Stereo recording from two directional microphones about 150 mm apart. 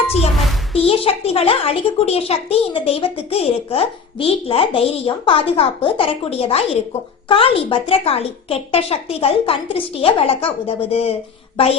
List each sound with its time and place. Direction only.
0.3 s music: centre (ahead or behind)
0.9 s a woman's voice: 40° left (ahead or behind)